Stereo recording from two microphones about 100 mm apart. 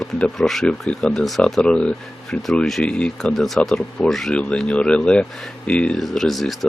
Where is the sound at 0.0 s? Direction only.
5° left (ahead or behind).